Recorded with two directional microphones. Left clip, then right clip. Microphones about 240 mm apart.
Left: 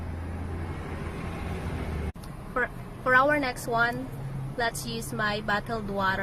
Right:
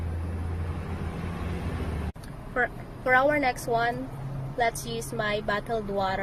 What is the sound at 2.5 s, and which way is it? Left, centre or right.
Speech, centre.